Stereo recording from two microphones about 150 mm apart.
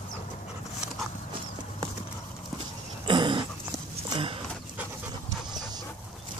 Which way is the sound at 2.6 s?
30° right (ahead or behind).